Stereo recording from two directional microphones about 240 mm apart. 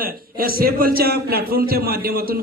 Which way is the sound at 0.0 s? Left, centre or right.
Right.